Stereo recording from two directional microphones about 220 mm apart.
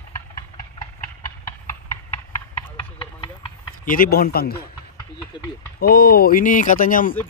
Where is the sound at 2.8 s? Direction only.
25° left (ahead or behind).